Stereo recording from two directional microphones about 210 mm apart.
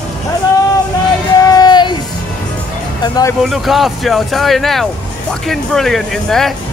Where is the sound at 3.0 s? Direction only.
20° left (ahead or behind).